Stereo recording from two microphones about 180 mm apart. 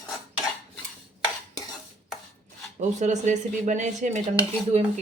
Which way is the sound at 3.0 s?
40° right (ahead or behind).